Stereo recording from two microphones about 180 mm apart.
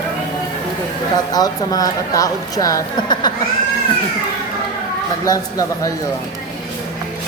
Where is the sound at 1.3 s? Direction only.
20° left (ahead or behind).